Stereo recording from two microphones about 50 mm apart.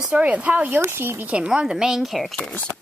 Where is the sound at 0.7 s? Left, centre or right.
Right.